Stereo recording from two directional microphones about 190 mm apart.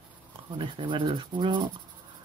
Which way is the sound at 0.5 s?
25° right (ahead or behind).